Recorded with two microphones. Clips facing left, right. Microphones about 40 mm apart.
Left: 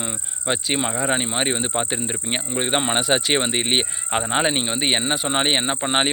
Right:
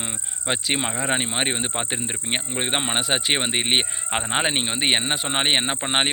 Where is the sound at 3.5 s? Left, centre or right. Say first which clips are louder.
Even; right.